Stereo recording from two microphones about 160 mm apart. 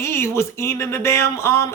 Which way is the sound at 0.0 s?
15° left (ahead or behind).